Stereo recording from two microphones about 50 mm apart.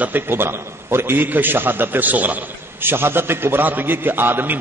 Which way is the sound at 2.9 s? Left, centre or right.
Right.